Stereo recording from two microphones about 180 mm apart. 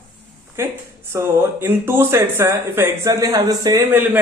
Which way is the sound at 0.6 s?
15° right (ahead or behind).